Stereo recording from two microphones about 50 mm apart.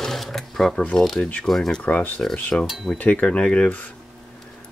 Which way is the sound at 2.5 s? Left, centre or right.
Left.